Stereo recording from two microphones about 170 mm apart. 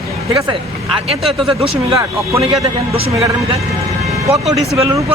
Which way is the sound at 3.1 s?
20° right (ahead or behind).